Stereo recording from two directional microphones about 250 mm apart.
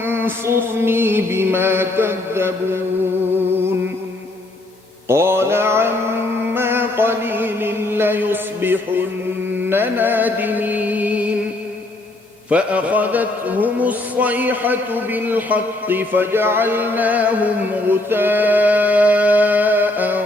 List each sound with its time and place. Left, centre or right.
0.0 s a man's voice: centre
5.0 s music: centre
9.6 s a man's voice: centre
12.5 s a man's voice: centre